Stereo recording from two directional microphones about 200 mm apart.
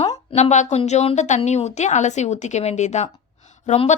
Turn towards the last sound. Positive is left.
turn(degrees=35)  # may be behind; listen again after turning